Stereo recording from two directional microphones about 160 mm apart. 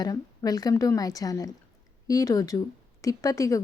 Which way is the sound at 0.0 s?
25° left (ahead or behind).